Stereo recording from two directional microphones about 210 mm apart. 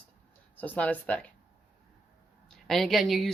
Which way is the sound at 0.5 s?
10° left (ahead or behind).